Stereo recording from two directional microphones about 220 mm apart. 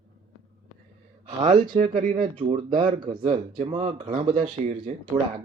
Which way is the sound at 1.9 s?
35° right (ahead or behind).